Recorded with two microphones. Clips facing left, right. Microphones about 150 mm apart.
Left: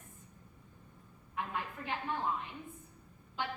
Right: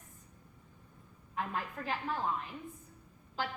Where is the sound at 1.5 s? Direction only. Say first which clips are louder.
Right 1 dB; 35° right (ahead or behind).